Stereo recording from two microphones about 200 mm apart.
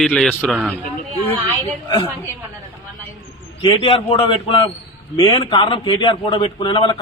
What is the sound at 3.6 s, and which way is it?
A man's voice, 25° left (ahead or behind).